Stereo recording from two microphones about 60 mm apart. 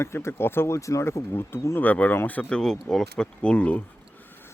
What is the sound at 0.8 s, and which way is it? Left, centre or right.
Speech, left.